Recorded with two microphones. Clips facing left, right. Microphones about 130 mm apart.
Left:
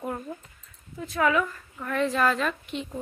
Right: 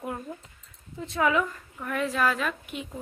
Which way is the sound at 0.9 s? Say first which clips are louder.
Left 1 dB; 25° right (ahead or behind).